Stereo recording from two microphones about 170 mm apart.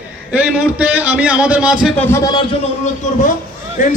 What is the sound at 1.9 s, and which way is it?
Speech, 15° left (ahead or behind).